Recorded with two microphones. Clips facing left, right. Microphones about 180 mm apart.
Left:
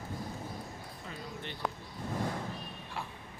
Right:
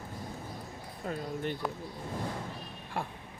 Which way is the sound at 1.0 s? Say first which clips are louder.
Right 10 dB; 45° right (ahead or behind).